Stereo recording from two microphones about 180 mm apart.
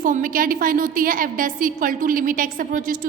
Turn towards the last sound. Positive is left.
turn(degrees=-50)  # may be behind; listen again after turning